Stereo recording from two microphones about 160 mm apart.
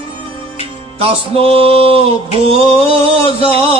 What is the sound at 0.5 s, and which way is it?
Music, 35° right (ahead or behind).